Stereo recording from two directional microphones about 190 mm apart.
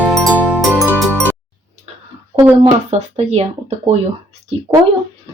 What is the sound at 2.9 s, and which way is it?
Speech, 35° right (ahead or behind).